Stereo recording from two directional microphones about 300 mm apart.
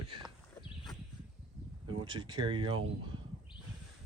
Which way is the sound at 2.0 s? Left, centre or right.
Centre.